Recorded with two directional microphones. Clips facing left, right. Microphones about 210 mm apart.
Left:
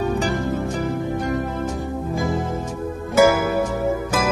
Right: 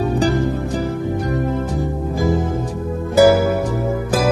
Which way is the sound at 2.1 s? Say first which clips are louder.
Right 5 dB; centre (ahead or behind).